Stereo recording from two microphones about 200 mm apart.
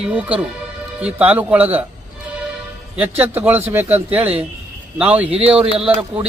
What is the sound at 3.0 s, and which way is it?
Speech, 10° right (ahead or behind).